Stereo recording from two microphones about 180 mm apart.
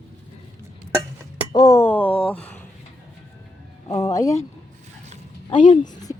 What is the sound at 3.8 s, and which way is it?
Speech, 20° left (ahead or behind).